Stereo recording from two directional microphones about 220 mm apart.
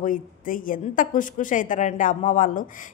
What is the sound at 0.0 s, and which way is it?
A woman's voice, 40° left (ahead or behind).